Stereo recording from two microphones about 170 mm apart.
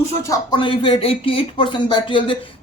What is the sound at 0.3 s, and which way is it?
Speech, 30° left (ahead or behind).